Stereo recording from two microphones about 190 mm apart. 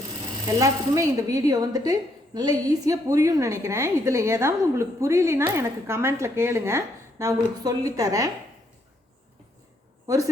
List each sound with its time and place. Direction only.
0.4 s speech: 15° right (ahead or behind)